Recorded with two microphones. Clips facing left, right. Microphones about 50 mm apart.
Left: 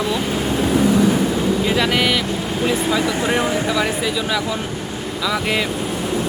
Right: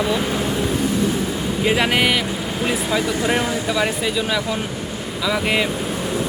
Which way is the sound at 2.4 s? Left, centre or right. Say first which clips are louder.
Left 2 dB; centre.